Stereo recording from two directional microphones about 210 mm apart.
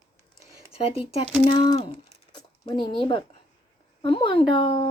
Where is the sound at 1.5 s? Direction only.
20° left (ahead or behind).